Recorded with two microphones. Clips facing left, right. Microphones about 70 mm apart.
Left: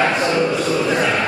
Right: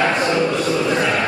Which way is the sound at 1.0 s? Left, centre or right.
Centre.